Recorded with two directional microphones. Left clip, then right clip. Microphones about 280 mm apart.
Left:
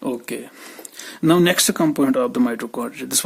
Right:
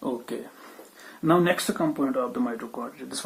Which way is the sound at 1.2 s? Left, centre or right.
Left.